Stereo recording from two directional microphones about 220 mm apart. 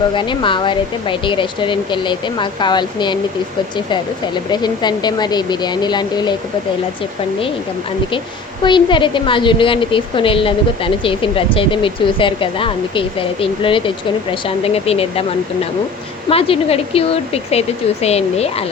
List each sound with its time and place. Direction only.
0.1 s a woman's voice: 20° left (ahead or behind)
8.6 s a woman's voice: 20° left (ahead or behind)
16.3 s a woman's voice: 25° left (ahead or behind)